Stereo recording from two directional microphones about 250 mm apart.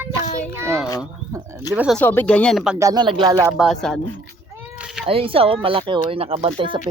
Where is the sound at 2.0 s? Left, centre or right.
Centre.